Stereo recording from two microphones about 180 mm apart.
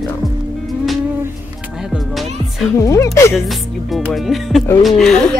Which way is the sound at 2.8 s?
15° left (ahead or behind).